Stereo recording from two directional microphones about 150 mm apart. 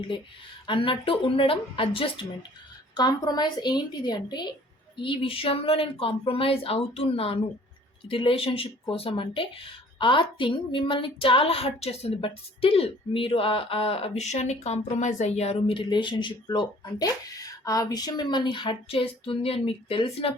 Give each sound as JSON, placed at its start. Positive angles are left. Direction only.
{"t": 0.7, "sound": "speech", "side_deg": 35}
{"t": 2.9, "sound": "a woman's voice", "side_deg": 25}